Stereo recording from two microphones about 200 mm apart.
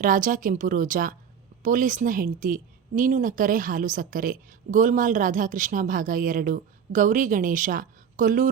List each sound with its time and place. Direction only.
0.0 s a woman's voice: 45° right (ahead or behind)